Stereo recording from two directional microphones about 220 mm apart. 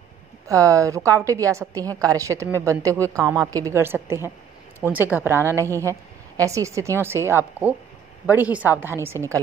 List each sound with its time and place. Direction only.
0.5 s a woman's voice: 15° right (ahead or behind)